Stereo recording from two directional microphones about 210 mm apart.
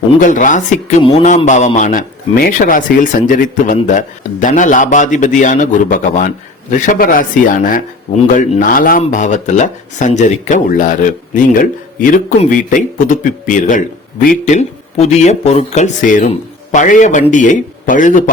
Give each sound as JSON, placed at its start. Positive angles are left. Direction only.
{"t": 0.2, "sound": "a man's voice", "side_deg": 40}